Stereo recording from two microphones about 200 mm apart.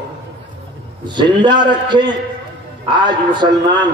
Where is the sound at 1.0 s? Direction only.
20° right (ahead or behind).